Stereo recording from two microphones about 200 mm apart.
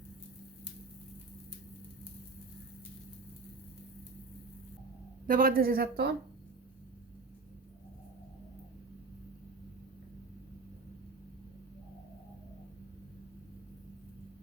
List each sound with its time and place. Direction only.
5.3 s a woman's voice: 45° right (ahead or behind)